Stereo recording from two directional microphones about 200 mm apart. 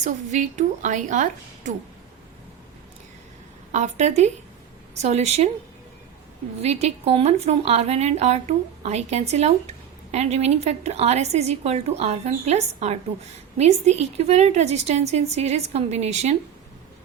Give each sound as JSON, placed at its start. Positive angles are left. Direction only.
{"t": 0.0, "sound": "a woman's voice", "side_deg": -35}
{"t": 3.7, "sound": "a woman's voice", "side_deg": -35}
{"t": 6.6, "sound": "a woman's voice", "side_deg": -30}